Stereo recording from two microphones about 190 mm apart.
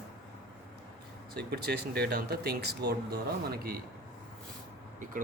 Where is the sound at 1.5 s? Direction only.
60° right (ahead or behind).